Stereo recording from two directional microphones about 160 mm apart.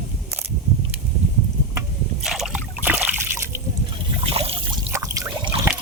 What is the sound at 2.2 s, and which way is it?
Boat, centre (ahead or behind).